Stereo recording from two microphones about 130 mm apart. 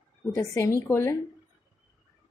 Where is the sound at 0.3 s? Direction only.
25° left (ahead or behind).